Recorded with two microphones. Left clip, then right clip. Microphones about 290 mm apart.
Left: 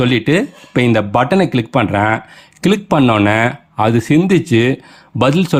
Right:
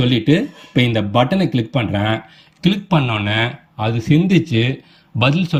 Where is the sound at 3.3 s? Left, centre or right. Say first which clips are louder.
Left 5 dB; centre.